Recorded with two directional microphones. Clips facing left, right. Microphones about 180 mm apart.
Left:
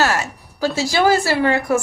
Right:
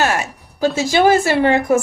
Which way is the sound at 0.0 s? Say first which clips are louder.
Right 1 dB; 15° right (ahead or behind).